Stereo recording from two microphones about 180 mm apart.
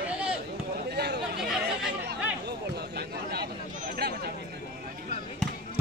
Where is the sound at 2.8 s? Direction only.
60° right (ahead or behind).